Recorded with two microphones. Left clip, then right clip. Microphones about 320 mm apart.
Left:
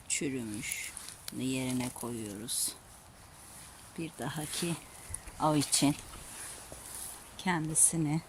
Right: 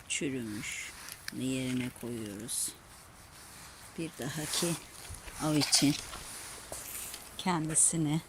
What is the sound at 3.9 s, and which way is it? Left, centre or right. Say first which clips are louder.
Speech: even; centre.